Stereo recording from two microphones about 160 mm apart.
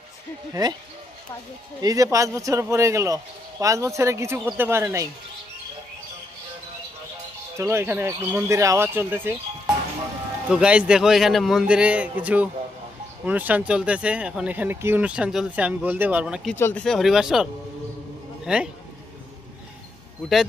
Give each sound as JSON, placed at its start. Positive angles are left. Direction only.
{"t": 0.5, "sound": "speech", "side_deg": -25}
{"t": 1.8, "sound": "speech", "side_deg": -20}
{"t": 7.6, "sound": "speech", "side_deg": -15}
{"t": 10.5, "sound": "speech", "side_deg": -5}
{"t": 16.6, "sound": "speech", "side_deg": 15}
{"t": 16.8, "sound": "speech", "side_deg": 0}